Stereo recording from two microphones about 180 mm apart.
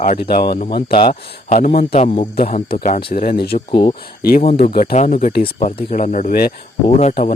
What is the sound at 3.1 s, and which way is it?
Speech, 55° left (ahead or behind).